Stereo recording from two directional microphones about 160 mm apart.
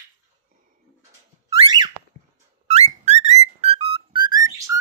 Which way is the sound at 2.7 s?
45° right (ahead or behind).